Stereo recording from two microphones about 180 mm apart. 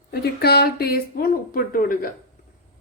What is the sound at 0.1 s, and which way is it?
Speech, 60° left (ahead or behind).